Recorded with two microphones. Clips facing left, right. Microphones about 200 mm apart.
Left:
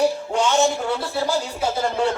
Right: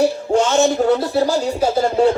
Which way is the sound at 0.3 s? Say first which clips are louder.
Right 7 dB; 45° right (ahead or behind).